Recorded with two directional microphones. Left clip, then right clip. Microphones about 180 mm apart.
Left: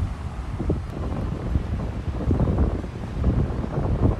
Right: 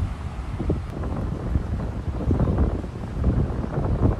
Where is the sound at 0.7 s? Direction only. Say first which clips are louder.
Even; centre (ahead or behind).